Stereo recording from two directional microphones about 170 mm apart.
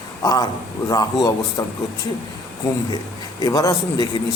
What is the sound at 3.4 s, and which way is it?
Speech, 20° left (ahead or behind).